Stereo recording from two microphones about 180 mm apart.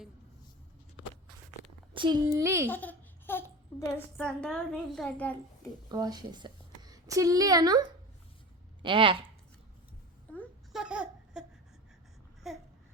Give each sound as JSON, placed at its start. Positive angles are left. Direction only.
{"t": 1.9, "sound": "a child's voice", "side_deg": -25}
{"t": 2.6, "sound": "a child's voice", "side_deg": 10}
{"t": 5.9, "sound": "a woman's voice", "side_deg": -20}
{"t": 10.7, "sound": "laughter", "side_deg": -5}
{"t": 12.4, "sound": "babbling", "side_deg": 0}